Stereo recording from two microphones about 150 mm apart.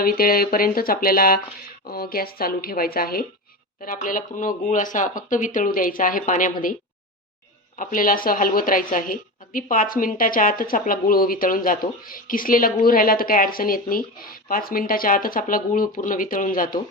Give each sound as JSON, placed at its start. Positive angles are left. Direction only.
{"t": 0.0, "sound": "speech", "side_deg": 80}
{"t": 1.9, "sound": "speech", "side_deg": 85}
{"t": 3.8, "sound": "speech", "side_deg": 65}
{"t": 7.8, "sound": "speech", "side_deg": 65}